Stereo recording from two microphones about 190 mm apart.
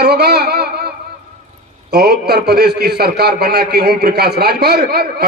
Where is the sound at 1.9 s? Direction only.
55° right (ahead or behind).